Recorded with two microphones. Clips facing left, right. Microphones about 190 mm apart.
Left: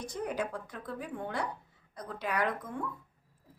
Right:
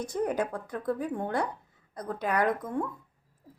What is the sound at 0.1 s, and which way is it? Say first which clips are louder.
Speech: right 5 dB; 50° right (ahead or behind).